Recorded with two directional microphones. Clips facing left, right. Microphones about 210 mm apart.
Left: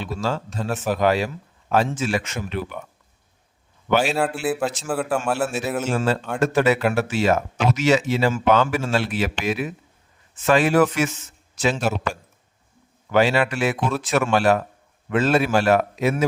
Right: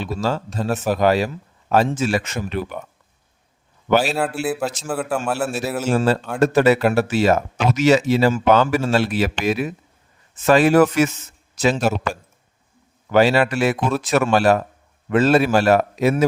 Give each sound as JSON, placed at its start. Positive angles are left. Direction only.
{"t": 0.0, "sound": "speech", "side_deg": -40}
{"t": 4.0, "sound": "a man's voice", "side_deg": 0}
{"t": 5.9, "sound": "speech", "side_deg": -40}
{"t": 13.1, "sound": "speech", "side_deg": -40}